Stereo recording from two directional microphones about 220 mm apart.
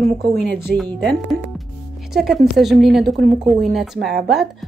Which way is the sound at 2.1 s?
Centre (ahead or behind).